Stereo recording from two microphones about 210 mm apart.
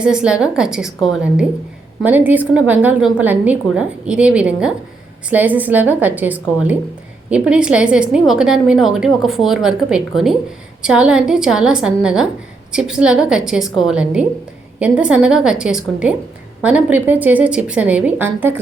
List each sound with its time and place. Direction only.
0.0 s a woman's voice: 5° right (ahead or behind)